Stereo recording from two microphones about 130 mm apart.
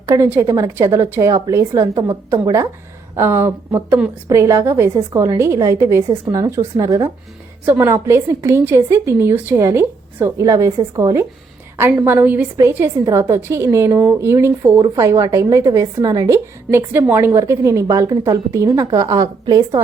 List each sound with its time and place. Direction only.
0.0 s a woman's voice: 20° right (ahead or behind)
3.2 s a woman's voice: 20° right (ahead or behind)
7.6 s a woman's voice: 15° right (ahead or behind)
13.1 s a woman's voice: 25° right (ahead or behind)